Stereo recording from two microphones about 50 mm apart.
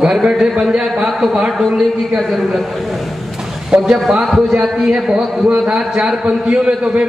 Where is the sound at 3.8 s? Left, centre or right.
Centre.